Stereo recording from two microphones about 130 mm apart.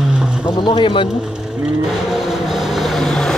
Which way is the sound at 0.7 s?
40° left (ahead or behind).